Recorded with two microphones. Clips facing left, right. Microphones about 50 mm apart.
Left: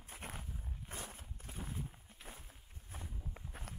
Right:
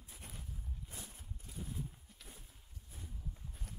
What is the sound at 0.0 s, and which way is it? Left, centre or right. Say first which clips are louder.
Walk: left 6 dB; left.